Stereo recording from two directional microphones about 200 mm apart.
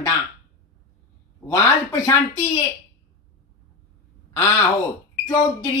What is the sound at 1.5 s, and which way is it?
Speech, 15° left (ahead or behind).